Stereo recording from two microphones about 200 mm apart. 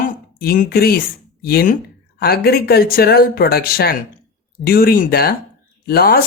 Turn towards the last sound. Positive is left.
turn(degrees=50)  # may be behind; listen again after turning